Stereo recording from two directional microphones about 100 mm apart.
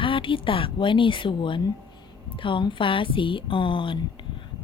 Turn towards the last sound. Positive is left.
turn(degrees=55)  # may be behind; listen again after turning